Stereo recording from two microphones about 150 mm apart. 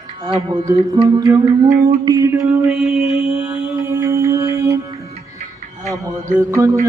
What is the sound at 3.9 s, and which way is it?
Music, 20° right (ahead or behind).